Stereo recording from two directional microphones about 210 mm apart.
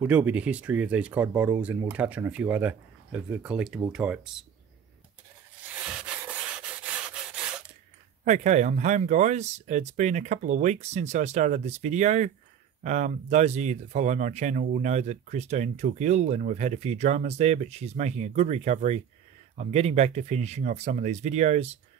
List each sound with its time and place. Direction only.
0.0 s speech: 5° right (ahead or behind)
8.3 s speech: 35° right (ahead or behind)